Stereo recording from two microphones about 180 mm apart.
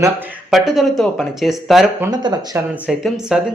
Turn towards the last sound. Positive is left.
turn(degrees=-5)  # may be behind; listen again after turning